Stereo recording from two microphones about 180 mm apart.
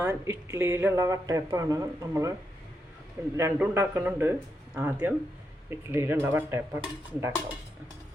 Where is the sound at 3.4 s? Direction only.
10° right (ahead or behind).